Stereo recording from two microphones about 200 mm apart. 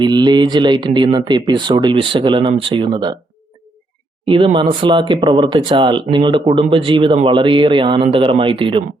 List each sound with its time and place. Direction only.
0.0 s speech: 20° right (ahead or behind)
4.3 s speech: 25° right (ahead or behind)